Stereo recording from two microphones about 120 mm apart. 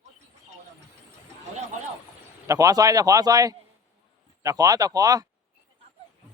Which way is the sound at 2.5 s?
30° right (ahead or behind).